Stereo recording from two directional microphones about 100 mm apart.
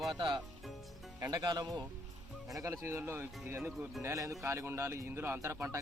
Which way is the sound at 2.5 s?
30° right (ahead or behind).